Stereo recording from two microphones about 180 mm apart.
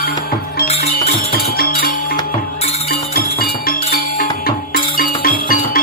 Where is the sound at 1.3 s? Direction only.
55° left (ahead or behind).